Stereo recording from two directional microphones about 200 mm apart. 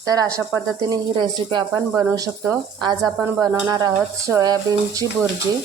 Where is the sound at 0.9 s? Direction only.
20° right (ahead or behind).